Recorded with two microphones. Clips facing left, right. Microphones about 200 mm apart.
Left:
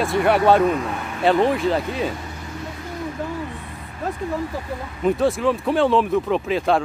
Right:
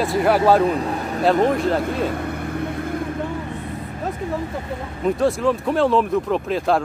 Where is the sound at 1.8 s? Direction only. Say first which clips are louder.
Right 3 dB; 60° right (ahead or behind).